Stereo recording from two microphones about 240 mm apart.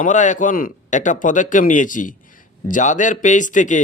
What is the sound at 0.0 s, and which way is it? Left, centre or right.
Speech, left.